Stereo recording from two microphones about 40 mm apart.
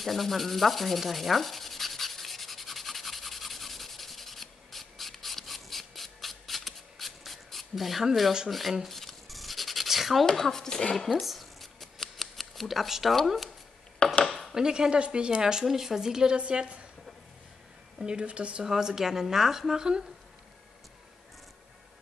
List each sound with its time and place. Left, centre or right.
0.0 s sanding: centre
8.5 s speech: centre
8.8 s a sound: centre
10.2 s speech: centre
11.1 s scissors: centre
12.6 s speech: centre
14.2 s a sound: centre
14.5 s speech: centre
15.6 s speech: centre
16.3 s speech: right
17.9 s speech: right
18.6 s speech: centre